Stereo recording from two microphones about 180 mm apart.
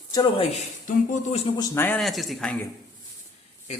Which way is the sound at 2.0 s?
Centre (ahead or behind).